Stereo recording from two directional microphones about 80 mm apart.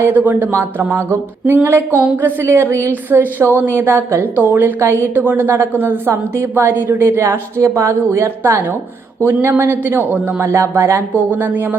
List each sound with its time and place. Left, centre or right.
0.0 s a woman's voice: right
6.1 s a woman's voice: right
10.5 s a woman's voice: right
11.1 s a woman's voice: right